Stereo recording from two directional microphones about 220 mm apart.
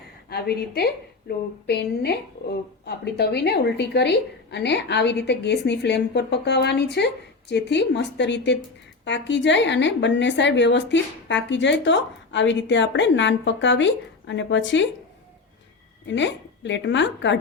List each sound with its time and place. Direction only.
0.3 s speech: 45° left (ahead or behind)
16.0 s a woman's voice: 55° left (ahead or behind)